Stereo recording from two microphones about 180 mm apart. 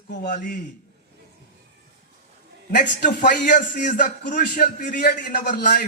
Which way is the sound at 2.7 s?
45° left (ahead or behind).